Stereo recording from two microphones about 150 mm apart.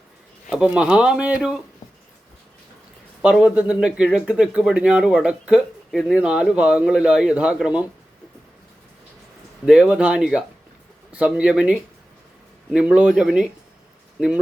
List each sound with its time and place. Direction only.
0.5 s speech: 5° right (ahead or behind)
3.2 s speech: 5° right (ahead or behind)
9.6 s speech: 5° right (ahead or behind)